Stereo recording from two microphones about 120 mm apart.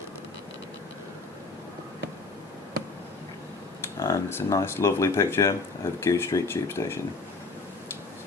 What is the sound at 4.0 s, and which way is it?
Speech, 25° left (ahead or behind).